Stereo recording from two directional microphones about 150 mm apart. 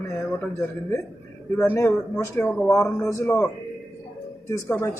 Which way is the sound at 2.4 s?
Centre (ahead or behind).